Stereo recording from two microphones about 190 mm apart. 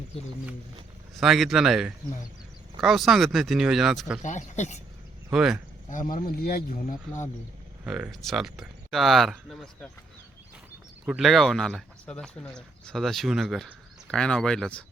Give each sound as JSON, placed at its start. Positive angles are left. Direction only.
{"t": 1.1, "sound": "speech", "side_deg": 0}
{"t": 4.2, "sound": "speech", "side_deg": 40}
{"t": 5.3, "sound": "speech", "side_deg": -5}
{"t": 5.9, "sound": "speech", "side_deg": 45}
{"t": 7.9, "sound": "speech", "side_deg": -5}
{"t": 11.0, "sound": "speech", "side_deg": 0}